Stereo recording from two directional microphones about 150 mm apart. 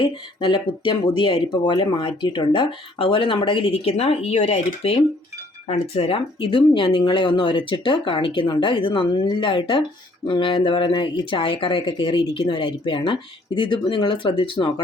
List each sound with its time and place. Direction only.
0.0 s speech: 35° left (ahead or behind)